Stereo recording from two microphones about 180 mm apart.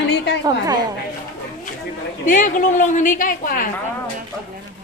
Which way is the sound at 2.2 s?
45° left (ahead or behind).